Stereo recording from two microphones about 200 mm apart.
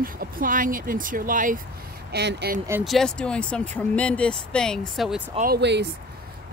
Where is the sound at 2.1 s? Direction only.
55° right (ahead or behind).